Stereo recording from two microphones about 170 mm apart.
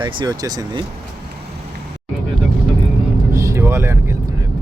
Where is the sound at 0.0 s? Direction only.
30° right (ahead or behind).